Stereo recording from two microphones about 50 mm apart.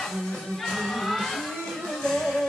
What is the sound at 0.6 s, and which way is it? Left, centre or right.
Music, centre.